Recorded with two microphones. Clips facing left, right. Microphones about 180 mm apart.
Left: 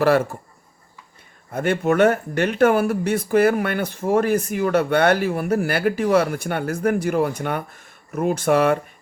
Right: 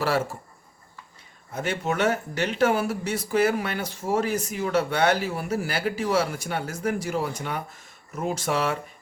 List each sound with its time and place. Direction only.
1.5 s speech: 55° left (ahead or behind)